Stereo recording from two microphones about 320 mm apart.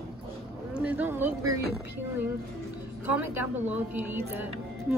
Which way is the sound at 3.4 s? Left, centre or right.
Centre.